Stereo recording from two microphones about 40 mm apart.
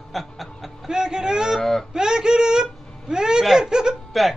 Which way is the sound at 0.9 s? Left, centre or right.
Centre.